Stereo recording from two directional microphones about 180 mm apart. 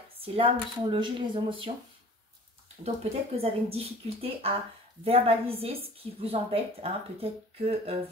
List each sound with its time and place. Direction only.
0.2 s speech: 25° right (ahead or behind)
2.8 s a woman's voice: 35° right (ahead or behind)